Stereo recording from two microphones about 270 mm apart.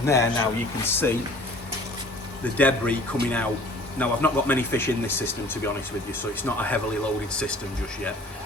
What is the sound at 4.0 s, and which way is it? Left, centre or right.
Speech, centre.